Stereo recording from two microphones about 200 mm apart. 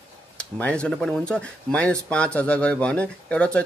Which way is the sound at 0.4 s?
5° left (ahead or behind).